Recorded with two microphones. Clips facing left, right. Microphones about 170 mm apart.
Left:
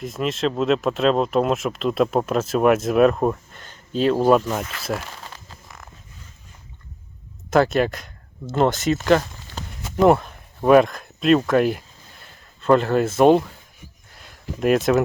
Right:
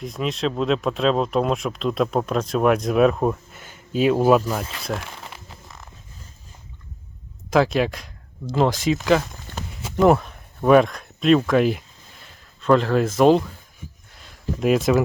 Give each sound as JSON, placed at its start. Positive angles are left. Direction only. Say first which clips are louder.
{"t": 0.0, "sound": "speech", "louder": "left 1 dB", "side_deg": 0}
{"t": 5.0, "sound": "crumpling", "louder": "even", "side_deg": -15}
{"t": 7.5, "sound": "speech", "louder": "left 1 dB", "side_deg": 0}